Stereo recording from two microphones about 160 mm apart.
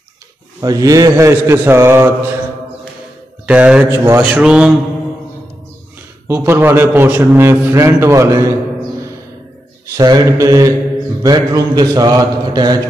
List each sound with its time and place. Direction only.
0.6 s a man's voice: 25° right (ahead or behind)
3.4 s a man's voice: 5° right (ahead or behind)
6.2 s a man's voice: 15° right (ahead or behind)
9.9 s a man's voice: 25° right (ahead or behind)